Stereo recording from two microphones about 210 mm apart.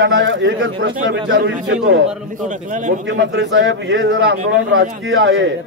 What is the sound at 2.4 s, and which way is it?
Speech, 35° right (ahead or behind).